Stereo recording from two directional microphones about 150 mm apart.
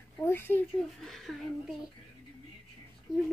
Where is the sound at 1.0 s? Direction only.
Centre (ahead or behind).